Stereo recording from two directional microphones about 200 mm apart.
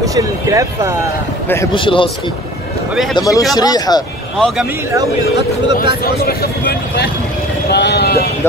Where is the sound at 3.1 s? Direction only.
15° left (ahead or behind).